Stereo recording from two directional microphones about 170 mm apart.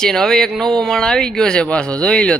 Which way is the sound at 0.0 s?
5° left (ahead or behind).